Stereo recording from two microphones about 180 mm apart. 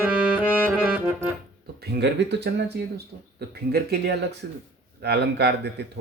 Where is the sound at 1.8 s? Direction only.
70° right (ahead or behind).